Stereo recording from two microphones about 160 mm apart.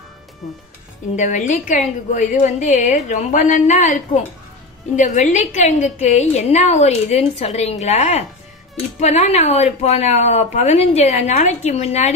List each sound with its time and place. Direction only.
1.1 s a woman's voice: 50° left (ahead or behind)